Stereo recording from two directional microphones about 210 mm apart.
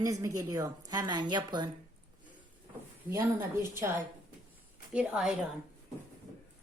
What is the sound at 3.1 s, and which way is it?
A woman's voice, 10° right (ahead or behind).